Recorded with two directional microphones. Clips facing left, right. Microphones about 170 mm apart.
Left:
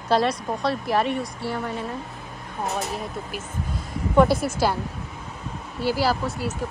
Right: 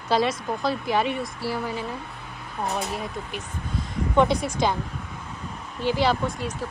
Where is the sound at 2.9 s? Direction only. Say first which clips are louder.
Even; 5° left (ahead or behind).